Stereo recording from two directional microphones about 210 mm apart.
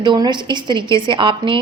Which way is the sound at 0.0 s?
20° right (ahead or behind).